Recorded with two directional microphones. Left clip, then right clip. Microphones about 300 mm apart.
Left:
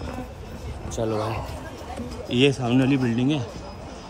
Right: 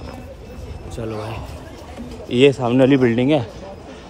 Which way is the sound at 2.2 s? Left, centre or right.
Centre.